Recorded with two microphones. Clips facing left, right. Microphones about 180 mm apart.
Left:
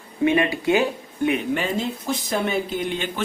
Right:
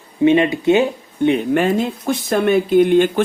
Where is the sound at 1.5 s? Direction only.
55° right (ahead or behind).